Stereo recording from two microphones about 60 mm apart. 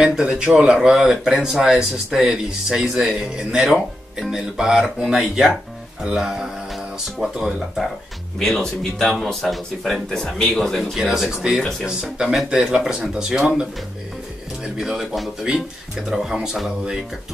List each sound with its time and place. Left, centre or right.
0.0 s speech: centre
14.8 s speech: centre